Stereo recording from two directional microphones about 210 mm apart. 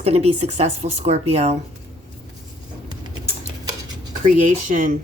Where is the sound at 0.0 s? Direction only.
30° right (ahead or behind).